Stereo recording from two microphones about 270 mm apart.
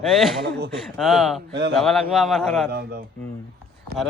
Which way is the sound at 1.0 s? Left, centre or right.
Centre.